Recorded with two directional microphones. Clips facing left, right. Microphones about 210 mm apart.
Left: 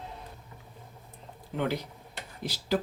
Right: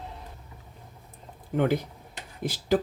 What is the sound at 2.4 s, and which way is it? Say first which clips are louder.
Speech: right 5 dB; 50° right (ahead or behind).